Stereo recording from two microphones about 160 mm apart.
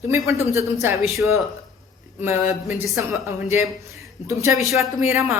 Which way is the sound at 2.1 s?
15° right (ahead or behind).